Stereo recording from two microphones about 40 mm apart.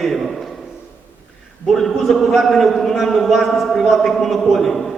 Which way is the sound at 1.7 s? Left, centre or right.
Centre.